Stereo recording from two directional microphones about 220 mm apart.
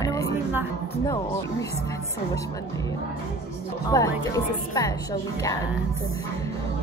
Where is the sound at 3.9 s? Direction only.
15° left (ahead or behind).